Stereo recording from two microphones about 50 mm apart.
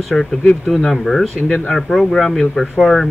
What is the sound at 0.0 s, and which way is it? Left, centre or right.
Speech, centre.